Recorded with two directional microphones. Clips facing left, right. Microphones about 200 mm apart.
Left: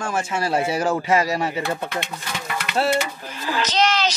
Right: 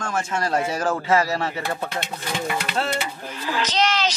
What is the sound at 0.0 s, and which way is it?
Speech, 10° left (ahead or behind).